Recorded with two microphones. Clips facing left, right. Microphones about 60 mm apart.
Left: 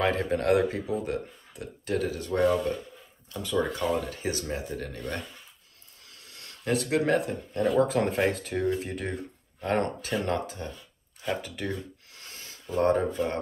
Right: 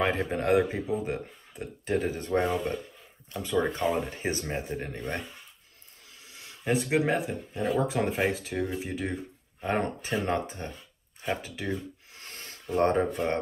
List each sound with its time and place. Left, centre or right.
0.0 s speech: centre
6.0 s a sound: centre
7.7 s speech: centre
10.0 s speech: right
11.4 s speech: centre
12.1 s a sound: right